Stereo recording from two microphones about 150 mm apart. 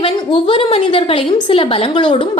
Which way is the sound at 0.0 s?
35° left (ahead or behind).